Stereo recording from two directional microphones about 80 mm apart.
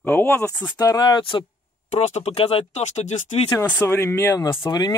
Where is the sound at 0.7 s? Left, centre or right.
Left.